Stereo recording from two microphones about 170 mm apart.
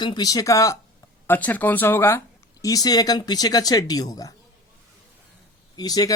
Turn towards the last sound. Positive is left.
turn(degrees=20)  # may be behind; listen again after turning